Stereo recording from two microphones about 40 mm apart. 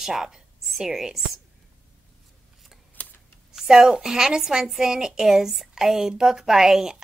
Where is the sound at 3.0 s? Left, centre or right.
Left.